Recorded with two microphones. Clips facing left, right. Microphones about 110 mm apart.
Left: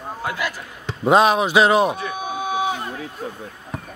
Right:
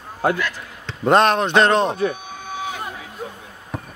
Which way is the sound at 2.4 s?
15° left (ahead or behind).